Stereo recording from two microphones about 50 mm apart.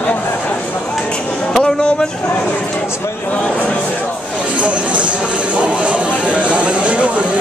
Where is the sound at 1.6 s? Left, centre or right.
Centre.